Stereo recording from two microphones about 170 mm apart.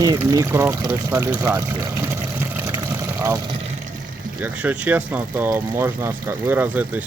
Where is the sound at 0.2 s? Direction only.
15° right (ahead or behind).